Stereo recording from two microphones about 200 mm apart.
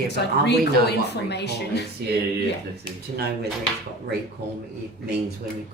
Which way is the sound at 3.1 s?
55° right (ahead or behind).